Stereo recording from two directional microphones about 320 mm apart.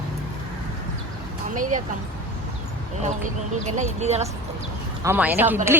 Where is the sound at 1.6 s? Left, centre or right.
Right.